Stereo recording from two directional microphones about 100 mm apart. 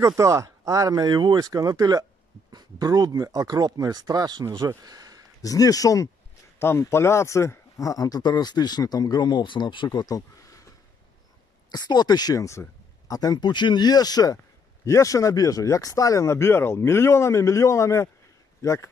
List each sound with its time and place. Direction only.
0.2 s speech: 30° right (ahead or behind)
5.4 s speech: 35° left (ahead or behind); by 9.8 s 55° left (ahead or behind)
9.8 s speech: 35° left (ahead or behind)
11.7 s speech: 40° left (ahead or behind)